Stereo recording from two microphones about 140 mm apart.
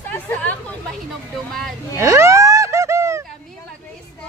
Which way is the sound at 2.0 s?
20° right (ahead or behind).